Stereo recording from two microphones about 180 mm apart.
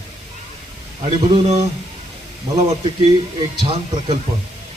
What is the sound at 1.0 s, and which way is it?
Speech, 30° right (ahead or behind).